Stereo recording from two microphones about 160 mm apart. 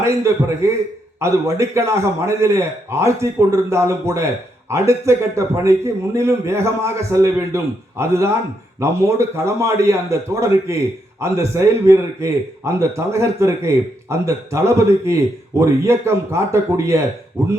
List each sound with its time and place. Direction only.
0.0 s a man's voice: 20° right (ahead or behind)